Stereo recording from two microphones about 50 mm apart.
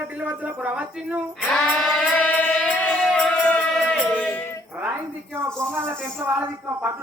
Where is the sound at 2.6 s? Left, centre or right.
Centre.